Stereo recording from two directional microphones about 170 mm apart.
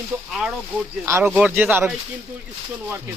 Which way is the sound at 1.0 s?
15° right (ahead or behind).